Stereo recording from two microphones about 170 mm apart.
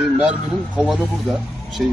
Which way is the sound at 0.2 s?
5° right (ahead or behind).